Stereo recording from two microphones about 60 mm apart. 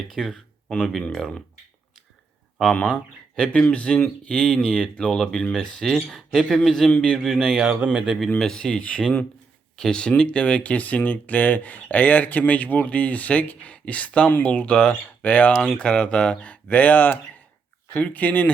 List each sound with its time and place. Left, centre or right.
0.1 s speech: centre
2.7 s speech: left; by 7.6 s centre
7.9 s speech: centre
8.4 s speech: centre
8.8 s speech: left
9.7 s speech: centre